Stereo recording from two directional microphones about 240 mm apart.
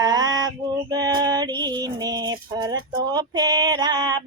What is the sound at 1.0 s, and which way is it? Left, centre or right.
Female singing, centre.